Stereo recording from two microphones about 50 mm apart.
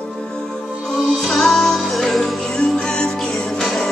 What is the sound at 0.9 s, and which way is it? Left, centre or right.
Music, centre.